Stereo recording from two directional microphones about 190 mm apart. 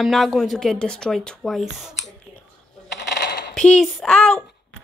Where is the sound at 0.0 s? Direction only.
Centre (ahead or behind).